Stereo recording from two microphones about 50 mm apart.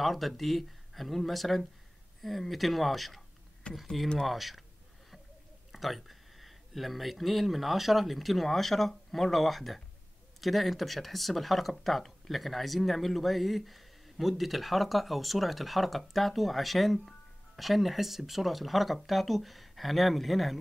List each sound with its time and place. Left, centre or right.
0.0 s speech: centre
3.6 s speech: left
4.3 s speech: centre
5.7 s speech: centre